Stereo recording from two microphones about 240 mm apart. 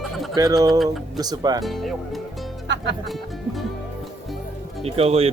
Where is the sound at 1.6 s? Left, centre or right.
Centre.